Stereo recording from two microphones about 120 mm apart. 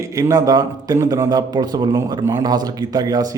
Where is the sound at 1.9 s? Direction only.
25° right (ahead or behind).